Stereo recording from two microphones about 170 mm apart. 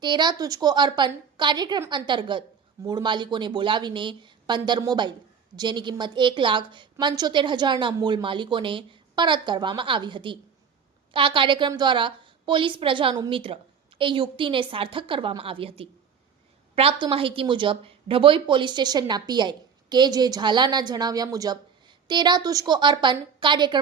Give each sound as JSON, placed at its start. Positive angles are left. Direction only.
{"t": 0.0, "sound": "a woman's voice", "side_deg": -25}